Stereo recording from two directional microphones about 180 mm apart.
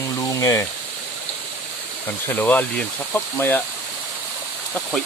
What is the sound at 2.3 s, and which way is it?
Speech, 10° left (ahead or behind).